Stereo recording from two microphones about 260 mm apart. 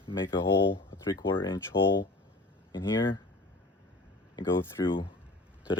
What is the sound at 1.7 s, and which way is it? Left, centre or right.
Speech, left.